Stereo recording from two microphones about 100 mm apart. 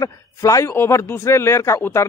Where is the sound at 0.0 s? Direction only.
30° left (ahead or behind).